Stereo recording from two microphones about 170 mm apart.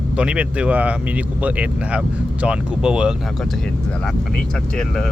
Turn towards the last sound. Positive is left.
turn(degrees=-5)  # may be behind; listen again after turning